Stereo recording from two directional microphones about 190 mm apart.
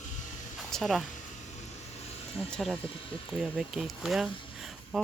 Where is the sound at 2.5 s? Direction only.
Centre (ahead or behind).